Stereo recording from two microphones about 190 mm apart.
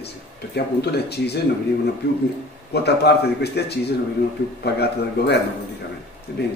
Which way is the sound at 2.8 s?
60° left (ahead or behind).